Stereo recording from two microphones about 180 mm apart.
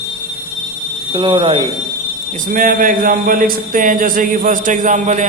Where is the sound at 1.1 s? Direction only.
25° right (ahead or behind).